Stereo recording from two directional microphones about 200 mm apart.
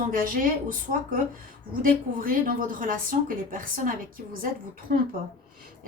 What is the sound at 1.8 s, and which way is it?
A woman's voice, 45° right (ahead or behind).